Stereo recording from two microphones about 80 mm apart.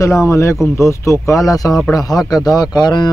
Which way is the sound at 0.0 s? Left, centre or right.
Left.